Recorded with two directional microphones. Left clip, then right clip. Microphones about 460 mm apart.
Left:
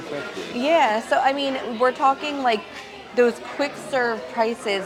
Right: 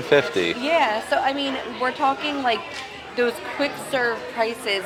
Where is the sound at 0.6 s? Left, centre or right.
Left.